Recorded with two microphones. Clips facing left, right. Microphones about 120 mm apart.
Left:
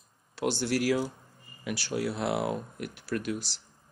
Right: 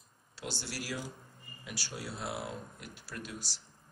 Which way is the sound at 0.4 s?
60° left (ahead or behind).